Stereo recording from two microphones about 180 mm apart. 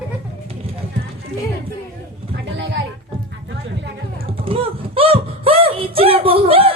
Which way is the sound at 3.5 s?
70° right (ahead or behind).